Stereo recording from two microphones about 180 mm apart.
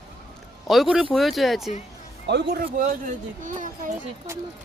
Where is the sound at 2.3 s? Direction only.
70° right (ahead or behind).